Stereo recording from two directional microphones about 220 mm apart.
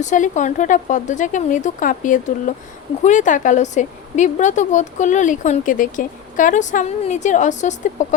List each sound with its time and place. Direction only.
0.0 s a woman's voice: 35° left (ahead or behind)